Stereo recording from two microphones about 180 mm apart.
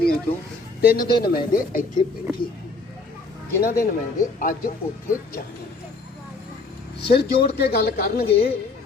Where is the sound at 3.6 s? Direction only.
60° left (ahead or behind).